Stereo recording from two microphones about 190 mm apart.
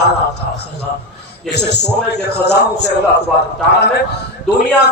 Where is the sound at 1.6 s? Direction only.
60° left (ahead or behind).